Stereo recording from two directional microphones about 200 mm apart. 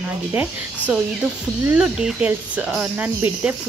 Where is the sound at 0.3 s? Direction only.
10° right (ahead or behind).